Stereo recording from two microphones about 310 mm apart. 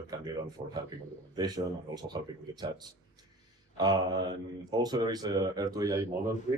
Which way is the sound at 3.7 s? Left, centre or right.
Centre.